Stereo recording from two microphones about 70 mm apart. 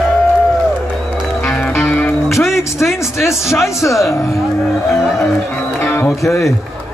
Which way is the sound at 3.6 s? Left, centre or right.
Left.